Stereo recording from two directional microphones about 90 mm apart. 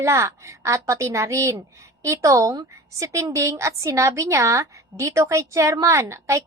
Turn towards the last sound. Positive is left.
turn(degrees=-30)  # may be behind; listen again after turning